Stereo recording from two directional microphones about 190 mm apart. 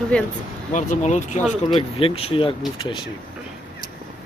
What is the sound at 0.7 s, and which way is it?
Speech, 40° left (ahead or behind).